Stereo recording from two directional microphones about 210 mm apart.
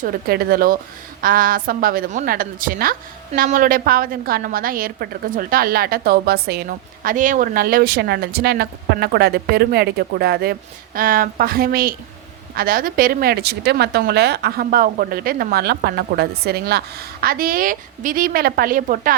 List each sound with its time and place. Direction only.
0.0 s a woman's voice: 45° right (ahead or behind)